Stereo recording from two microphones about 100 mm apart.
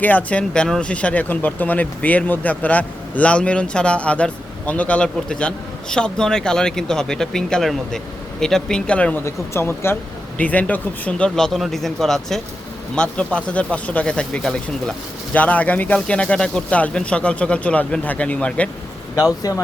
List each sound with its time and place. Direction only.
0.0 s speech: 15° left (ahead or behind)
9.2 s speech: 25° left (ahead or behind)
11.3 s speech: 5° left (ahead or behind)
19.1 s speech: 40° left (ahead or behind)